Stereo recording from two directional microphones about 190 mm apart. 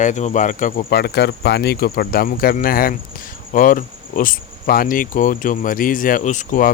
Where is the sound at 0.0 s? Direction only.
40° left (ahead or behind).